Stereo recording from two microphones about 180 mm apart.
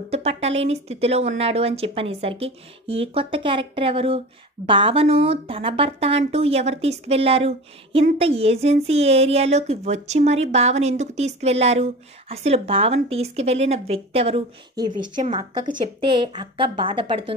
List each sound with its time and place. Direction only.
0.1 s a woman's voice: 35° right (ahead or behind)